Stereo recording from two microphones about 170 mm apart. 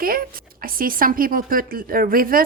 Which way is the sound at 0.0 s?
60° right (ahead or behind).